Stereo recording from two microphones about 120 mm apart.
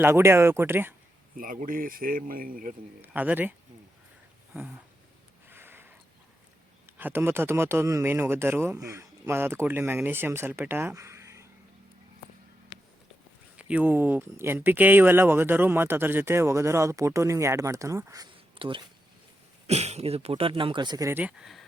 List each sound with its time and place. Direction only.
0.0 s speech: 20° right (ahead or behind)
3.0 s speech: 15° right (ahead or behind)
5.5 s a sound: 20° right (ahead or behind)
6.8 s speech: 15° right (ahead or behind)
13.6 s speech: 10° right (ahead or behind); by 18.3 s 25° right (ahead or behind)
18.6 s speech: 45° right (ahead or behind)
19.6 s speech: 65° right (ahead or behind); by 21.1 s 35° right (ahead or behind)
21.1 s speech: 10° right (ahead or behind)